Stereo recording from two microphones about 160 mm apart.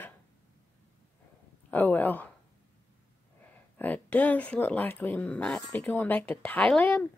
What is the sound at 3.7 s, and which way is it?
A woman's voice, 10° left (ahead or behind).